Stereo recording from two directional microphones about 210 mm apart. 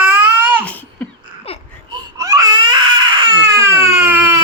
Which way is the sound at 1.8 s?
15° right (ahead or behind).